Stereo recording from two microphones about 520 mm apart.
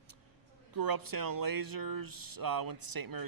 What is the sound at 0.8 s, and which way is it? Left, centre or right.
Speech, right.